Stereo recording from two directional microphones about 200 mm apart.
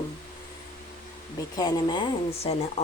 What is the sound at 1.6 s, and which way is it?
Speech, 20° left (ahead or behind).